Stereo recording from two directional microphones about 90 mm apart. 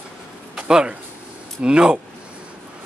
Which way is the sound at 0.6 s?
10° right (ahead or behind).